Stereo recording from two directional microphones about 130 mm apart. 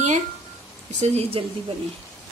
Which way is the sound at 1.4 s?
45° right (ahead or behind).